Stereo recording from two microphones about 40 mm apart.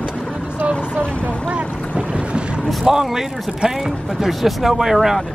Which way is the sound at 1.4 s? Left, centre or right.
Right.